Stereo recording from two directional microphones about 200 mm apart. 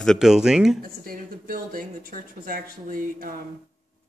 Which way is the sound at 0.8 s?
45° right (ahead or behind).